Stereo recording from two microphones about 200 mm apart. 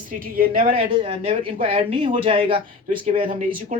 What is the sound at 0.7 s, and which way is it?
Speech, 25° right (ahead or behind).